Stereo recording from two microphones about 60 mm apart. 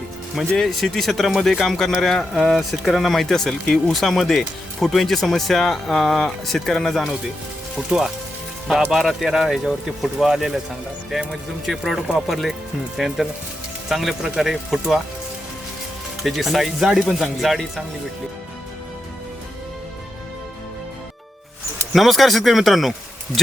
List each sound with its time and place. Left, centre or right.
0.3 s speech: centre
7.8 s speech: centre
16.2 s speech: centre
21.9 s speech: centre